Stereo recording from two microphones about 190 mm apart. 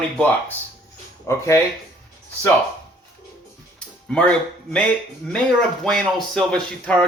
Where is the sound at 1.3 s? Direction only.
15° left (ahead or behind).